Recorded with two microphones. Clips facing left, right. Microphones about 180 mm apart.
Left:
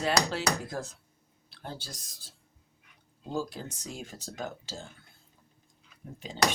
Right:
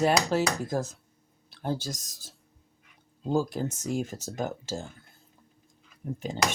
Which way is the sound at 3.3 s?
45° right (ahead or behind).